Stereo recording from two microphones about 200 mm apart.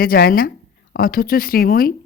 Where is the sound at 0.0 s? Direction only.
50° left (ahead or behind).